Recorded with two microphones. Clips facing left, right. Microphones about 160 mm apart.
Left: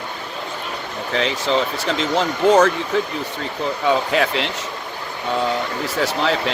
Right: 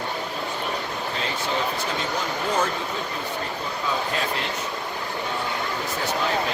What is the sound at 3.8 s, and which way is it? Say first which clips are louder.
Speech: left 9 dB; 85° left.